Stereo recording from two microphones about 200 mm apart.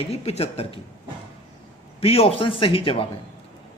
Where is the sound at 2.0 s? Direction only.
30° left (ahead or behind).